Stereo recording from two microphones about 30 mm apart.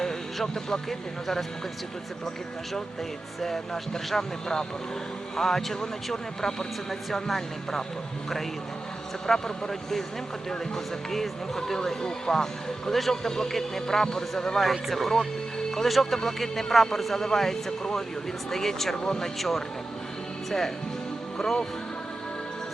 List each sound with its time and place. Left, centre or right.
0.4 s speech: centre
3.4 s speech: centre
9.2 s speech: centre
11.1 s speech: centre
14.6 s speech: centre
19.4 s speech: centre
21.3 s speech: centre